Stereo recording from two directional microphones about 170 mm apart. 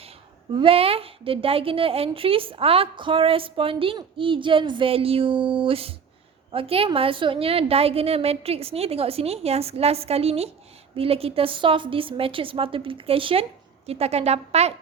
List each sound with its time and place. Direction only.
0.5 s a woman's voice: 30° right (ahead or behind)